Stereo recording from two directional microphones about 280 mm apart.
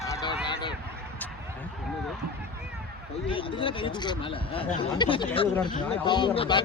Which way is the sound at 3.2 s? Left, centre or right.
Centre.